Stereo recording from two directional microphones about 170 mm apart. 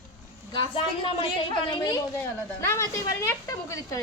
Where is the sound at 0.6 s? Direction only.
30° left (ahead or behind).